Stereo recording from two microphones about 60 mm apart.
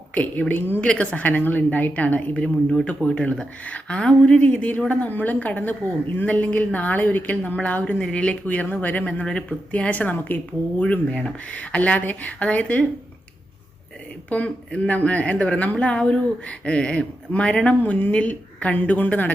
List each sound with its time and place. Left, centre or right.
0.1 s a woman's voice: left
14.3 s a woman's voice: left